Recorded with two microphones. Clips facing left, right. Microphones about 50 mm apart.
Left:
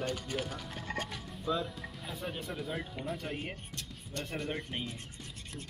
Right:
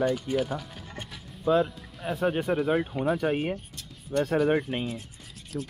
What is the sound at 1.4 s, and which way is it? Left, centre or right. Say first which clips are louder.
Speech: right 11 dB; right.